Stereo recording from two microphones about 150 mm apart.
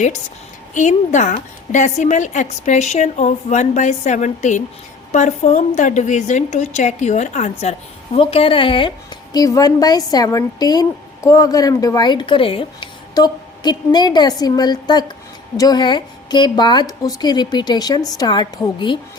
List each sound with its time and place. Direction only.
0.7 s a woman's voice: 55° left (ahead or behind); by 18.9 s 30° left (ahead or behind)